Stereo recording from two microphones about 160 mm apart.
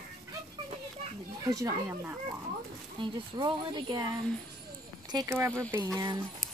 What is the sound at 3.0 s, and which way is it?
Speech, 30° right (ahead or behind).